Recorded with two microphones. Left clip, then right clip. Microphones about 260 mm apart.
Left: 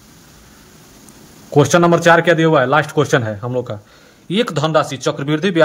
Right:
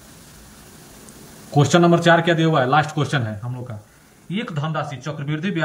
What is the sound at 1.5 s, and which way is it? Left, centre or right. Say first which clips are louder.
A man's voice: left 4 dB; centre.